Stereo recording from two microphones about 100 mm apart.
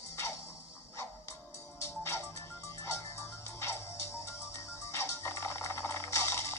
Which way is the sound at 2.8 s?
30° left (ahead or behind).